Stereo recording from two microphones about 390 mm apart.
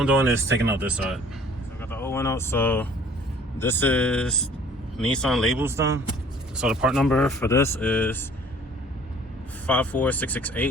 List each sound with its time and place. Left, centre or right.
0.0 s speech: centre
9.6 s speech: centre